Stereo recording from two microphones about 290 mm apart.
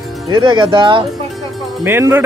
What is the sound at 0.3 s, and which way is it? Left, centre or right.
Speech, centre.